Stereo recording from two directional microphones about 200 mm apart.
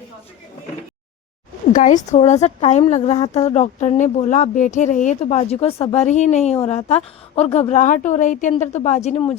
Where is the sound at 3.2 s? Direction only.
20° left (ahead or behind).